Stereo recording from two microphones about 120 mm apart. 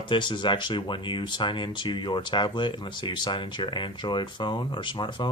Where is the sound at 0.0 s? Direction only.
40° left (ahead or behind).